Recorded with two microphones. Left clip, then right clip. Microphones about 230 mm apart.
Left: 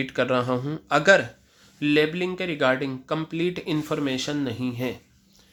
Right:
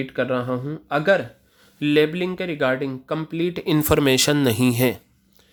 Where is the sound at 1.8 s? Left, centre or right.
Right.